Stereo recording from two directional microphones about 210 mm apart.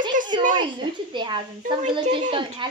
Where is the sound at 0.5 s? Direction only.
20° right (ahead or behind).